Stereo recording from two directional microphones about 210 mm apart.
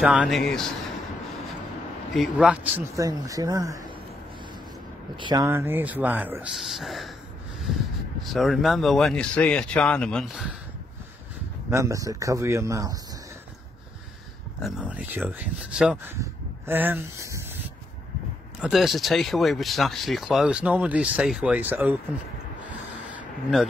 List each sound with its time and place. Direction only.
0.0 s speech: 5° right (ahead or behind)
2.1 s speech: 5° right (ahead or behind)
5.1 s speech: 20° right (ahead or behind); by 7.1 s centre (ahead or behind)
8.2 s speech: centre (ahead or behind)
11.7 s speech: 15° right (ahead or behind)
14.6 s speech: 5° right (ahead or behind)
18.6 s speech: centre (ahead or behind)
23.5 s speech: 5° right (ahead or behind)